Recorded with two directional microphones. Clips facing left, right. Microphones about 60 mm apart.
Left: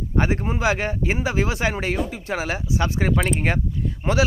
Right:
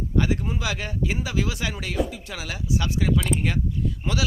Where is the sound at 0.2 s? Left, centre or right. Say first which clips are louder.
Left 3 dB; left.